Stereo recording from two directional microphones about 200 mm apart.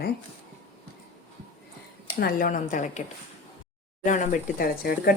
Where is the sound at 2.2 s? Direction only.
40° left (ahead or behind).